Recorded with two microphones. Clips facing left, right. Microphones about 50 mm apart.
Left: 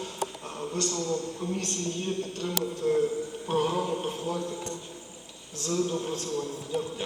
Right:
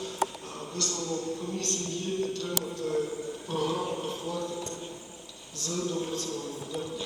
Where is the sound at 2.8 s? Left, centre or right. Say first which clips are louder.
Left 5 dB; left.